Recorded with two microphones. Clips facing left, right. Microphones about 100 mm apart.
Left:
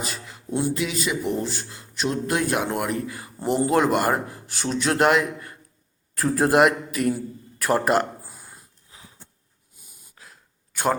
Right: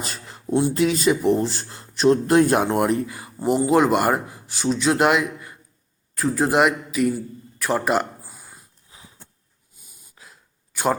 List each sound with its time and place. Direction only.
0.1 s a sound: 35° right (ahead or behind)
0.7 s speech: 40° right (ahead or behind); by 3.3 s 20° right (ahead or behind)
3.3 s speech: 5° right (ahead or behind)
4.4 s speech: centre (ahead or behind)
6.1 s speech: centre (ahead or behind)
7.9 s a sound: 5° right (ahead or behind)